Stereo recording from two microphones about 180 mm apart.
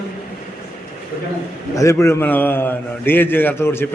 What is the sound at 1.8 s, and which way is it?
A man's voice, 15° left (ahead or behind).